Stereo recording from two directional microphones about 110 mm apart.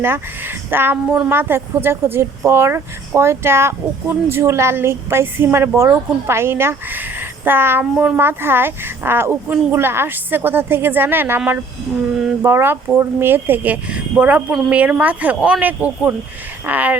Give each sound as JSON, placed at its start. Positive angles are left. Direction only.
{"t": 0.0, "sound": "a woman's voice", "side_deg": -20}